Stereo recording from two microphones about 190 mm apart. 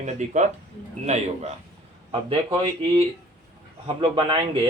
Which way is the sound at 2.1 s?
25° right (ahead or behind).